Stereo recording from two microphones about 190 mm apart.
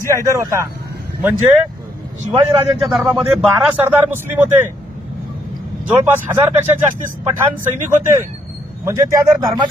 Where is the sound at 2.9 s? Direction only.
Centre (ahead or behind).